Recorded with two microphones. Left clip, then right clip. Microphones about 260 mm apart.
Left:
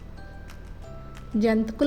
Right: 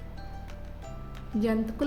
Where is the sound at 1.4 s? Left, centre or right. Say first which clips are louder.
Left 6 dB; left.